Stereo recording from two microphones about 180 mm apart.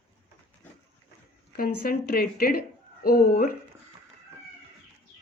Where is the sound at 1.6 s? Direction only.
55° left (ahead or behind).